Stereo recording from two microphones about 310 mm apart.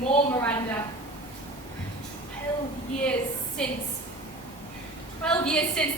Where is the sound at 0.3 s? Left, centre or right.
Centre.